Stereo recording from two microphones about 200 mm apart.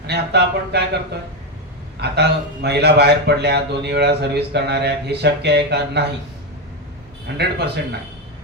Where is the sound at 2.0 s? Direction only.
55° right (ahead or behind).